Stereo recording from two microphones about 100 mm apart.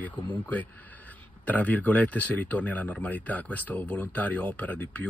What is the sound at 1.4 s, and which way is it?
Speech, 15° left (ahead or behind).